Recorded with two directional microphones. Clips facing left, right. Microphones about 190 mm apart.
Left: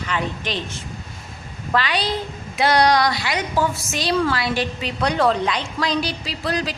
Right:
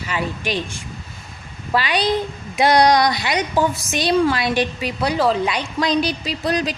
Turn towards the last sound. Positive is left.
turn(degrees=-20)  # may be behind; listen again after turning